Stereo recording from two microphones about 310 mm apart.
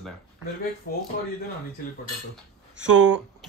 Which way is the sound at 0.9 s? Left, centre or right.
Left.